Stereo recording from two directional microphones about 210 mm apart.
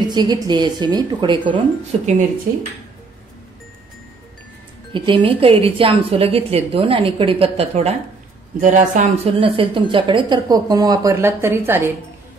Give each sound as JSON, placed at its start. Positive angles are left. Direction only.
{"t": 0.1, "sound": "a woman's voice", "side_deg": -20}
{"t": 4.9, "sound": "a woman's voice", "side_deg": -25}